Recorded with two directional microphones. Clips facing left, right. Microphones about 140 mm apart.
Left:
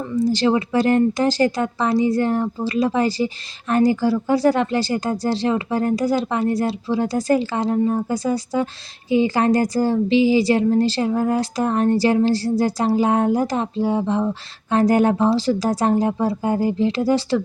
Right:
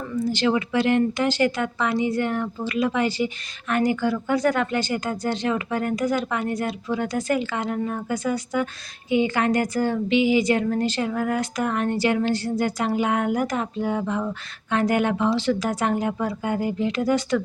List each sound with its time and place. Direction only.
0.3 s a woman's voice: 35° left (ahead or behind)